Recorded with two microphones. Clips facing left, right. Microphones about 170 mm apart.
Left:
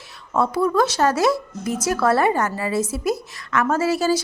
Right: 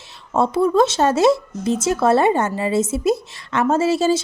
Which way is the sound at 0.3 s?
25° right (ahead or behind).